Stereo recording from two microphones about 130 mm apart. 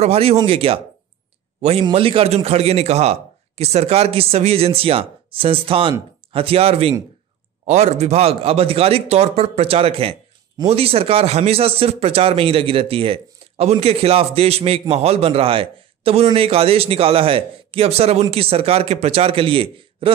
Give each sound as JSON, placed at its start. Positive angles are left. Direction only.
{"t": 0.0, "sound": "speech", "side_deg": -50}